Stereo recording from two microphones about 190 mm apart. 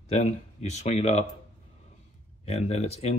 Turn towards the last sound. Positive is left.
turn(degrees=35)  # may be behind; listen again after turning